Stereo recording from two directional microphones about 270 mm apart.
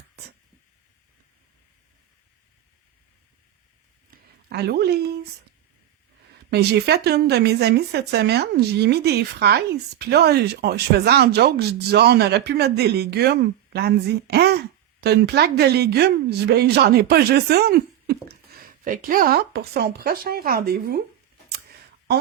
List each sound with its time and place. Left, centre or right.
4.4 s speech: right
6.5 s speech: right